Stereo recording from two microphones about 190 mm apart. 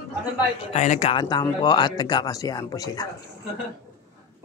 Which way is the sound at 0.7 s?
40° left (ahead or behind).